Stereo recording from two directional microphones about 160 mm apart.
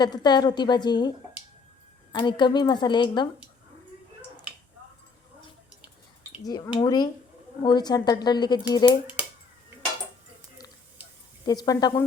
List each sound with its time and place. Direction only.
0.0 s speech: 25° left (ahead or behind)
2.1 s speech: 30° left (ahead or behind)
6.4 s speech: 25° left (ahead or behind)
11.4 s speech: 25° left (ahead or behind)